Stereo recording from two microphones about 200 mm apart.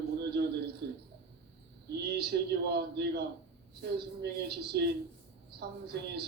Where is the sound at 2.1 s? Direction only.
55° right (ahead or behind).